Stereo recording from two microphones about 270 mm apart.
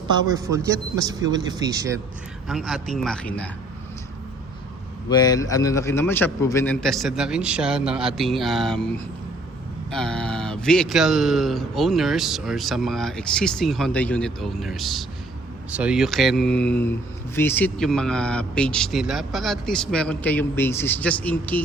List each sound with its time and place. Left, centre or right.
0.1 s a man's voice: centre
2.5 s speech: centre
5.0 s speech: centre
9.9 s speech: centre